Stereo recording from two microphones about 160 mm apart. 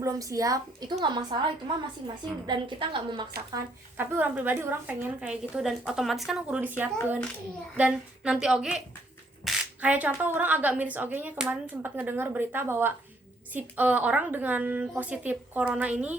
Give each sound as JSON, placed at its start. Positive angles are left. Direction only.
{"t": 0.0, "sound": "a woman's voice", "side_deg": -20}
{"t": 2.5, "sound": "a woman's voice", "side_deg": -30}
{"t": 3.5, "sound": "a woman's voice", "side_deg": -15}